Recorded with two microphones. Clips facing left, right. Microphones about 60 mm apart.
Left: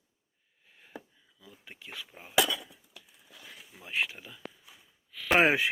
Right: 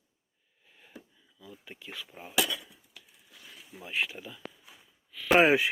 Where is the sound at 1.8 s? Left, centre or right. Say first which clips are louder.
Even; left.